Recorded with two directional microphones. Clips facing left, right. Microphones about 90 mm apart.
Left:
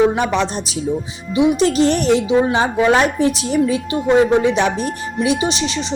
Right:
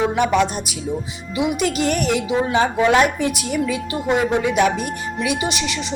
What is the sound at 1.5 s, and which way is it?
A woman's voice, 30° left (ahead or behind).